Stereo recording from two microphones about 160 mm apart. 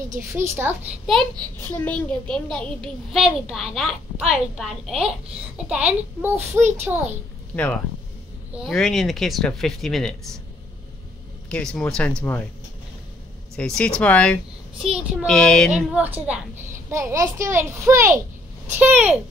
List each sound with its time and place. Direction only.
0.3 s a child's voice: 15° right (ahead or behind)
1.6 s a child's voice: 15° left (ahead or behind); by 7.2 s 10° right (ahead or behind)
7.5 s a child's voice: 10° left (ahead or behind)
11.4 s a child's voice: 5° left (ahead or behind)
13.6 s speech: 5° left (ahead or behind)
15.0 s a child's voice: 5° right (ahead or behind)
16.9 s a child's voice: 20° right (ahead or behind)